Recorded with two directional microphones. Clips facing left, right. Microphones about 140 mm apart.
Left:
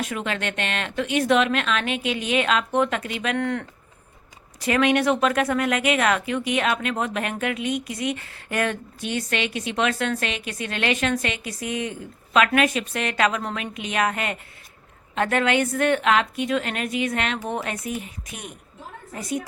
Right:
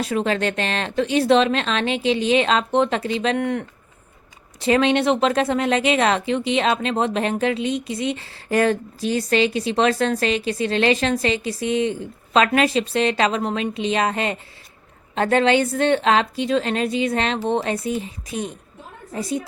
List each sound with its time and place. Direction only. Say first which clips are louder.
0.0 s speech: right 6 dB; 35° right (ahead or behind)